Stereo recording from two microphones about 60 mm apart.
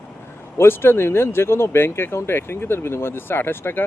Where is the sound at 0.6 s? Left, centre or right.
Left.